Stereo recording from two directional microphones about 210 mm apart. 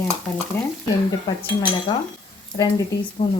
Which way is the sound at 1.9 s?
25° left (ahead or behind).